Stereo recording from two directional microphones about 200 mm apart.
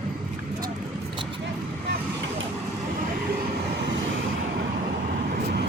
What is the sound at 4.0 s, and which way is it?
Vehicle, 75° right (ahead or behind).